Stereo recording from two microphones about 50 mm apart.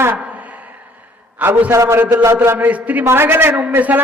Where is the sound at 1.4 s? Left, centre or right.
Right.